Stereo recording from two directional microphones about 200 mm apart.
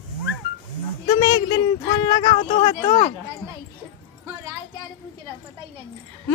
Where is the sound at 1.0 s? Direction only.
20° left (ahead or behind).